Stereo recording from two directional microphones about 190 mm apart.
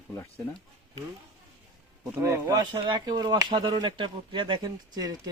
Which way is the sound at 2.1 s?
15° right (ahead or behind).